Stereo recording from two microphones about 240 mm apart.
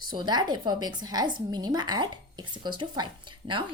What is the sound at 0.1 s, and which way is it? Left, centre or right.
A woman's voice, centre.